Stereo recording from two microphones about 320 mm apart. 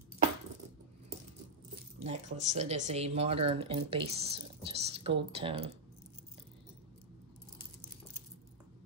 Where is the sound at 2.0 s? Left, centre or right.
Right.